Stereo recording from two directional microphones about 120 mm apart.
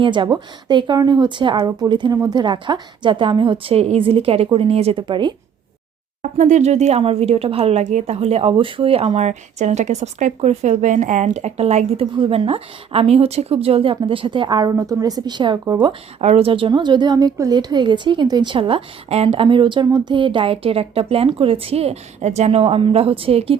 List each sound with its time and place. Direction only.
0.0 s a woman's voice: 45° right (ahead or behind)
5.0 s a woman's voice: 40° right (ahead or behind)
6.3 s speech: 80° right
12.1 s a woman's voice: 50° right (ahead or behind); by 15.9 s 35° right (ahead or behind)
16.2 s a woman's voice: 55° right (ahead or behind)